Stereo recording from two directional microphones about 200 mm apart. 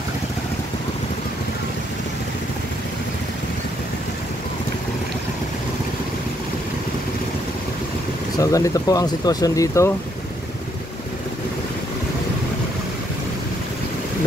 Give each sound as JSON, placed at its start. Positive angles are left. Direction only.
{"t": 8.4, "sound": "speech", "side_deg": 15}